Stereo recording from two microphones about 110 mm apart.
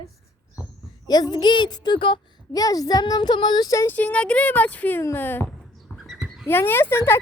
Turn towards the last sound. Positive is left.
turn(degrees=20)  # may be behind; listen again after turning